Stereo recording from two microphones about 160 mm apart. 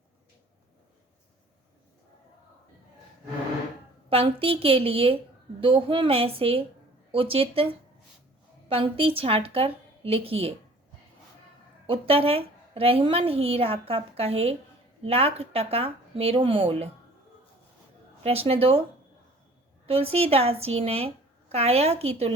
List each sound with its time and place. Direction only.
4.1 s a woman's voice: 35° right (ahead or behind)
8.7 s a woman's voice: 35° right (ahead or behind)
11.9 s a woman's voice: 35° right (ahead or behind)
18.2 s a woman's voice: 40° right (ahead or behind)
19.9 s a woman's voice: 40° right (ahead or behind)